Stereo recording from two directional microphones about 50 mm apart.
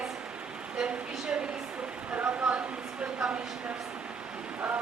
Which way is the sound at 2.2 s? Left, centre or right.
Right.